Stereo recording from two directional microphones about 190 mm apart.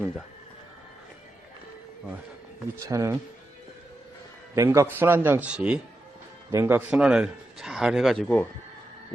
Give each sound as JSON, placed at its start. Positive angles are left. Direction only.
{"t": 2.8, "sound": "speech", "side_deg": -15}
{"t": 4.5, "sound": "a man's voice", "side_deg": -15}